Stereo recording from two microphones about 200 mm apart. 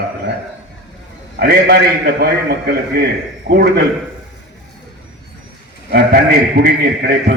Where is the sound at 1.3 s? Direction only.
50° right (ahead or behind).